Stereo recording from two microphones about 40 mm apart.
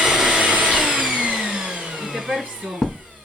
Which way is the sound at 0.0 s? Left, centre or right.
Centre.